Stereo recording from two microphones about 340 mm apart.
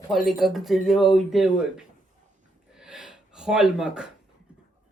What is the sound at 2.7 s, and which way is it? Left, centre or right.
Gasp, centre.